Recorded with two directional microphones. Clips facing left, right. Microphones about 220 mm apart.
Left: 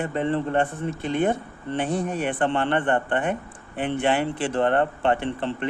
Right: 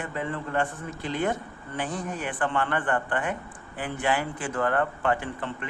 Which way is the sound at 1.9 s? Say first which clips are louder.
Left 7 dB; 65° left (ahead or behind).